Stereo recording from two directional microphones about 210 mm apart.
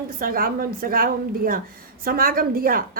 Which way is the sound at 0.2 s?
45° right (ahead or behind).